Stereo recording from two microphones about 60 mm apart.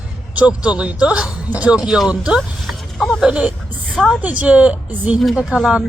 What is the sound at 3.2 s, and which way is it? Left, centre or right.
Speech, centre.